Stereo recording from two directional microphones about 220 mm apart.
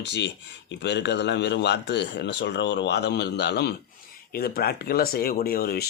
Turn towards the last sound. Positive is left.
turn(degrees=45)  # may be behind; listen again after turning